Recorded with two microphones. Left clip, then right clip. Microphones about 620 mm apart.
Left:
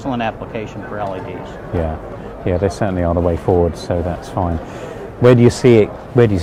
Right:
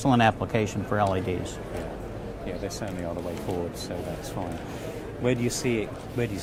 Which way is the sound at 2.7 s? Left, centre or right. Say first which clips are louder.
Left 15 dB; left.